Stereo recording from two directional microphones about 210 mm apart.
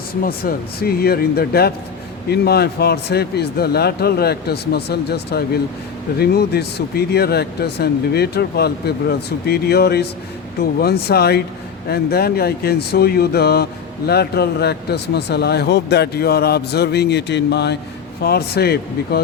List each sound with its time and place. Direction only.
0.2 s speech: 45° left (ahead or behind)